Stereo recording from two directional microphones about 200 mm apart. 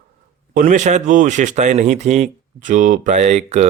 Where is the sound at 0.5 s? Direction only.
40° right (ahead or behind).